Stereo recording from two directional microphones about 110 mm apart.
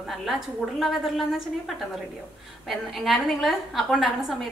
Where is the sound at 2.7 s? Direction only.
Centre (ahead or behind).